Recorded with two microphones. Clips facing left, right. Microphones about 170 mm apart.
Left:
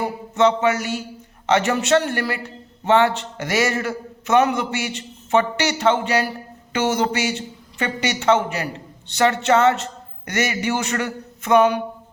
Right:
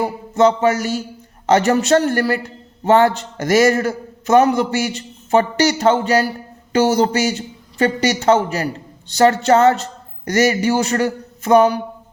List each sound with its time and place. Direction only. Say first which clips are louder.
0.3 s a man's voice: right 3 dB; 40° right (ahead or behind)